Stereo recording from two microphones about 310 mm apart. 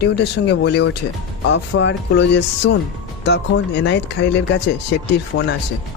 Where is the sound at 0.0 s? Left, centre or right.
Left.